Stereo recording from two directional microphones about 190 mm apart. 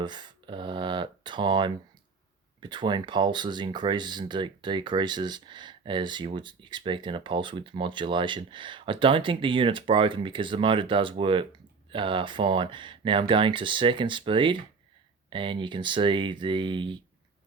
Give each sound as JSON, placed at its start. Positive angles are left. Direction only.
{"t": 0.0, "sound": "speech", "side_deg": -25}